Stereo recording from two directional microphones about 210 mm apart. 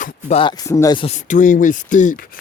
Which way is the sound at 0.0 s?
40° left (ahead or behind).